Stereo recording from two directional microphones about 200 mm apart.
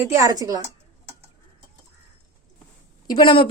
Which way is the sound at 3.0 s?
25° left (ahead or behind).